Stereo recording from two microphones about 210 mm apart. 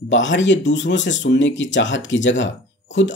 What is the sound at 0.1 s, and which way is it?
Speech, 60° left (ahead or behind).